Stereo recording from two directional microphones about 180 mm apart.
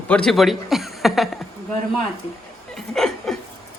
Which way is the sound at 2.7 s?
Centre (ahead or behind).